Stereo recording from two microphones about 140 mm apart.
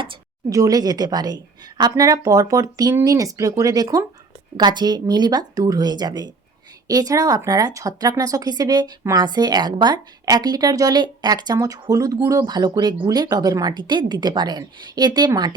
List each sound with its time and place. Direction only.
0.5 s speech: 25° right (ahead or behind)